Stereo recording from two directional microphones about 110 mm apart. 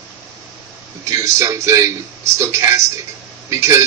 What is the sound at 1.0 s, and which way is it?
A man's voice, 25° right (ahead or behind).